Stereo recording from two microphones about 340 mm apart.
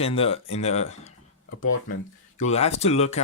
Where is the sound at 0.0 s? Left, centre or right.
Centre.